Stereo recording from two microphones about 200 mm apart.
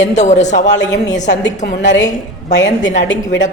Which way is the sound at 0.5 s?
60° left (ahead or behind).